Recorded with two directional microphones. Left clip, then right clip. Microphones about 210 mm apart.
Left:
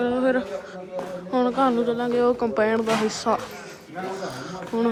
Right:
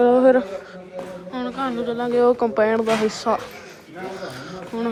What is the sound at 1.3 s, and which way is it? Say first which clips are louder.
A man's voice: left 5 dB; 25° left (ahead or behind).